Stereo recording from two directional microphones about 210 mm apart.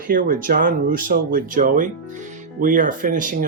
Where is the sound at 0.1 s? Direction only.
40° right (ahead or behind).